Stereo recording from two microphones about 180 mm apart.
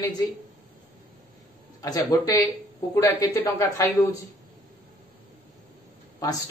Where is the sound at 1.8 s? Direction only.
20° left (ahead or behind).